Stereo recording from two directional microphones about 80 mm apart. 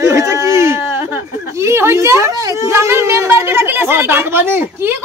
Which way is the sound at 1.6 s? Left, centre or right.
Right.